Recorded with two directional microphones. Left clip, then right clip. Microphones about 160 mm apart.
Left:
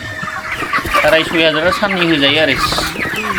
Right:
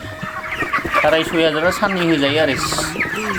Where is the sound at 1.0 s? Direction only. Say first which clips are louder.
Left 4 dB; 25° right (ahead or behind).